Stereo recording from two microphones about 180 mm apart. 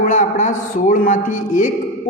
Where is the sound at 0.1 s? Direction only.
45° left (ahead or behind).